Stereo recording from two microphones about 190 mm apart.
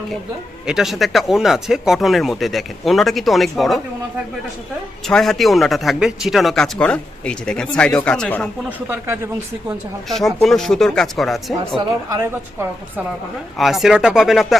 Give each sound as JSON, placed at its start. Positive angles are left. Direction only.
{"t": 0.7, "sound": "speech", "side_deg": 0}
{"t": 5.0, "sound": "speech", "side_deg": 0}
{"t": 8.9, "sound": "speech", "side_deg": -15}
{"t": 10.1, "sound": "speech", "side_deg": 0}
{"t": 13.6, "sound": "speech", "side_deg": 0}